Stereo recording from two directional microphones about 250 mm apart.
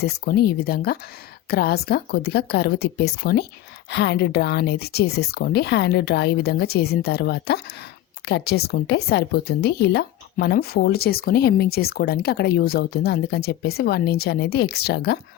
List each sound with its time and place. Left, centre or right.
0.0 s speech: left